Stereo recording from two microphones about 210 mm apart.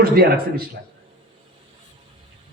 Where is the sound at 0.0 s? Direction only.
45° right (ahead or behind).